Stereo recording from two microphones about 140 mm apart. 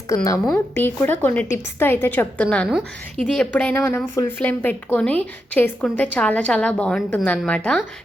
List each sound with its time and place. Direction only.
0.1 s a woman's voice: 25° left (ahead or behind)